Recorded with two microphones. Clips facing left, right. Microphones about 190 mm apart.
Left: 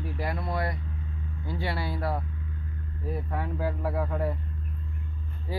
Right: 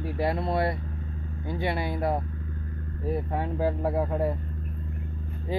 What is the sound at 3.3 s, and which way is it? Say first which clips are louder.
Speech: right 2 dB; 25° right (ahead or behind).